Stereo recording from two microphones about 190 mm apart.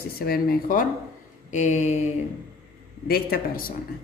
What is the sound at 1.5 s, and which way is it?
Mantra, 40° left (ahead or behind).